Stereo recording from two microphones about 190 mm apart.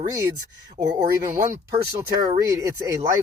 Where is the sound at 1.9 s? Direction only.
15° right (ahead or behind).